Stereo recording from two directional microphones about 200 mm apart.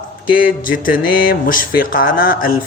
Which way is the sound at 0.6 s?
45° left (ahead or behind).